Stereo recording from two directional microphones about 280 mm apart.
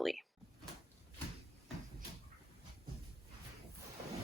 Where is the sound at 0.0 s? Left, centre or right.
Centre.